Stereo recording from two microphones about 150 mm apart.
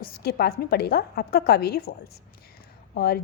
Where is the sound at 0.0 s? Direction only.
90° left.